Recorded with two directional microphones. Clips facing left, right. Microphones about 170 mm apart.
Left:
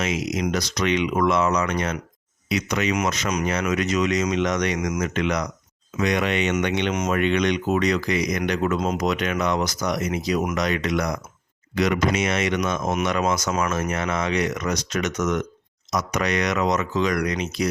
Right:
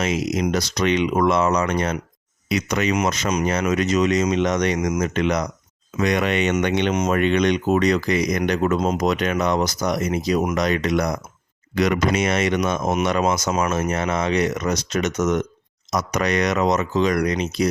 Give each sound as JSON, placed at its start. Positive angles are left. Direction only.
{"t": 0.0, "sound": "speech", "side_deg": -35}
{"t": 2.9, "sound": "speech", "side_deg": -30}
{"t": 6.0, "sound": "speech", "side_deg": -45}
{"t": 11.7, "sound": "speech", "side_deg": -50}
{"t": 12.1, "sound": "speech", "side_deg": -40}
{"t": 15.9, "sound": "speech", "side_deg": -35}